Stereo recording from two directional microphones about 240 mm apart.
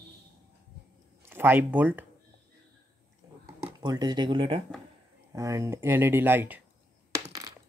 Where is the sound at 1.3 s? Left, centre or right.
Centre.